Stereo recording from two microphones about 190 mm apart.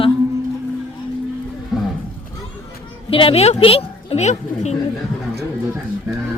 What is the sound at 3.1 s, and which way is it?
Speech, 30° left (ahead or behind).